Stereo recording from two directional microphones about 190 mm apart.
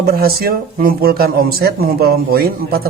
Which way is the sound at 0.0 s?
55° right (ahead or behind).